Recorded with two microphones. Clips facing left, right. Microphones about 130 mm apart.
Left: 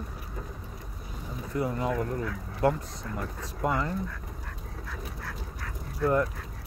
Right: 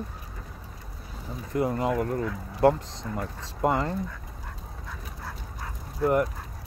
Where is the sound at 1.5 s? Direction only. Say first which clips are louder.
Right 3 dB; 25° right (ahead or behind).